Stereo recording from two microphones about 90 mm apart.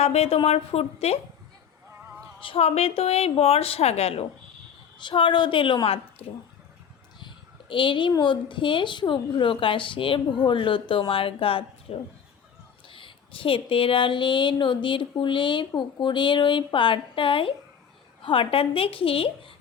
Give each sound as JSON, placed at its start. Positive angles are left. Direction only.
{"t": 0.3, "sound": "a woman's voice", "side_deg": 90}
{"t": 2.4, "sound": "a woman's voice", "side_deg": 85}
{"t": 4.9, "sound": "a woman's voice", "side_deg": 65}
{"t": 7.2, "sound": "a sound", "side_deg": 65}
{"t": 8.2, "sound": "a woman's voice", "side_deg": 65}
{"t": 11.1, "sound": "a woman's voice", "side_deg": 90}
{"t": 12.9, "sound": "a woman's voice", "side_deg": 80}